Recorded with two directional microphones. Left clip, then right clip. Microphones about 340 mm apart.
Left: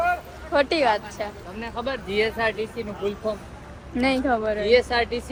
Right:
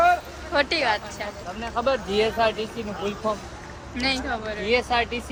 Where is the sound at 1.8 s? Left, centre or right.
Centre.